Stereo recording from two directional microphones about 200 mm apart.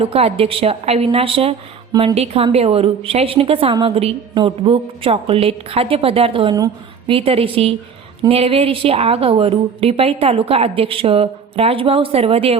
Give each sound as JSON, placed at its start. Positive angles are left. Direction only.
{"t": 0.0, "sound": "a woman's voice", "side_deg": -30}